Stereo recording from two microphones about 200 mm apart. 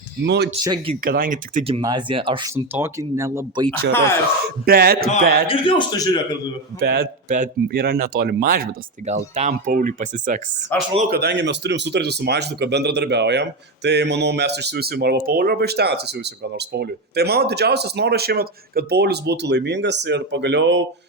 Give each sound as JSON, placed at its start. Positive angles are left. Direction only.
{"t": 0.3, "sound": "speech", "side_deg": -55}
{"t": 0.6, "sound": "speech", "side_deg": -20}
{"t": 1.0, "sound": "speech", "side_deg": -45}
{"t": 1.8, "sound": "speech", "side_deg": -20}
{"t": 2.7, "sound": "speech", "side_deg": -15}
{"t": 4.6, "sound": "speech", "side_deg": -50}
{"t": 5.5, "sound": "a man's voice", "side_deg": 25}
{"t": 6.7, "sound": "speech", "side_deg": -50}
{"t": 7.7, "sound": "speech", "side_deg": -50}
{"t": 10.7, "sound": "speech", "side_deg": 10}
{"t": 11.1, "sound": "speech", "side_deg": -55}